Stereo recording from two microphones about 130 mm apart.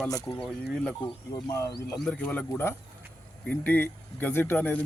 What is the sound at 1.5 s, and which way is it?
Speech, 25° left (ahead or behind).